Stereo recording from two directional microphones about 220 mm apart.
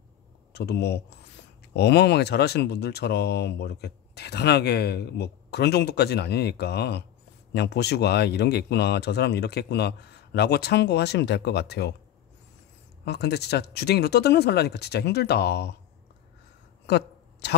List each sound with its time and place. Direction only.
0.5 s speech: 45° left (ahead or behind)
13.0 s speech: 50° left (ahead or behind)
16.8 s a sound: 50° left (ahead or behind)